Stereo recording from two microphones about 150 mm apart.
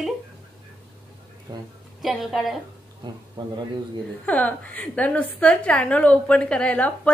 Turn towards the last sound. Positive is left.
turn(degrees=10)  # may be behind; listen again after turning